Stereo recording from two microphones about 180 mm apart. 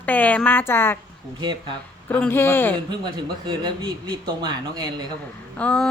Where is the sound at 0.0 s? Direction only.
10° left (ahead or behind).